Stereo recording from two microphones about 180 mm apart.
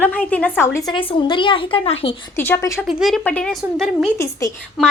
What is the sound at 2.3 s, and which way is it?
Speech, 15° left (ahead or behind).